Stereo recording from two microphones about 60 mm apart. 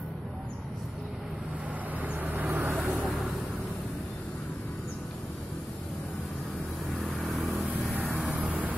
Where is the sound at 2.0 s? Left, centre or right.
Right.